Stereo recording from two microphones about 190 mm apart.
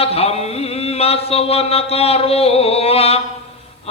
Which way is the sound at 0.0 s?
30° left (ahead or behind).